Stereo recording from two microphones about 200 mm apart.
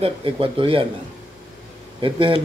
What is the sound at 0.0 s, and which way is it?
Speech, 25° right (ahead or behind).